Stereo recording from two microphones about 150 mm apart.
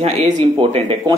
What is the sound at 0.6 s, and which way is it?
Speech, 35° right (ahead or behind).